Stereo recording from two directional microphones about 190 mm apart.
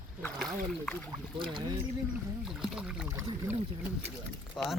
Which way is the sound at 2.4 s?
5° right (ahead or behind).